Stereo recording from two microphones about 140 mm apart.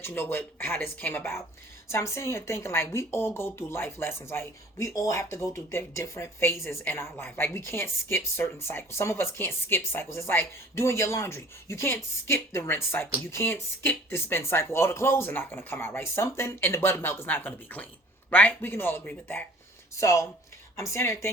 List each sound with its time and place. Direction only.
0.0 s a woman's voice: 15° left (ahead or behind)